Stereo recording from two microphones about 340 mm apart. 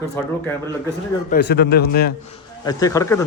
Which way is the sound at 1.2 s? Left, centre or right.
Left.